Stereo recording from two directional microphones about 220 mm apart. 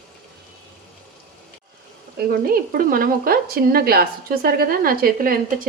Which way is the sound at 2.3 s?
40° right (ahead or behind).